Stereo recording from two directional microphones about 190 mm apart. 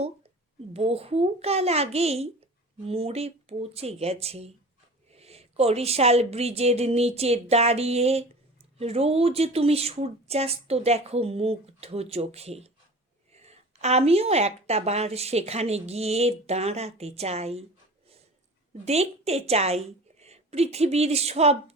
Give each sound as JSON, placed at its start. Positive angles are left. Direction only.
{"t": 0.7, "sound": "speech", "side_deg": -30}
{"t": 18.7, "sound": "a woman's voice", "side_deg": -35}